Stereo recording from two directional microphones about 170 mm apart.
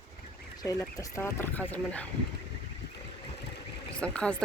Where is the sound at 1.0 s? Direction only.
15° left (ahead or behind).